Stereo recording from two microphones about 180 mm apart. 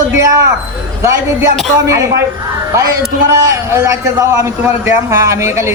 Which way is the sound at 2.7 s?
15° right (ahead or behind).